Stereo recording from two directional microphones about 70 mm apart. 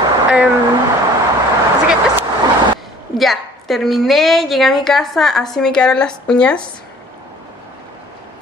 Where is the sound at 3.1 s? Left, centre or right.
Centre.